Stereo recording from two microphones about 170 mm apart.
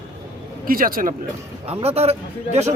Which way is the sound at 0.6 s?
55° right (ahead or behind).